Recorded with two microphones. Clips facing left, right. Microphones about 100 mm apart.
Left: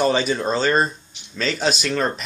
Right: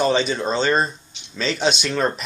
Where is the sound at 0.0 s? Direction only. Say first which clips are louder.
Even; 5° left (ahead or behind).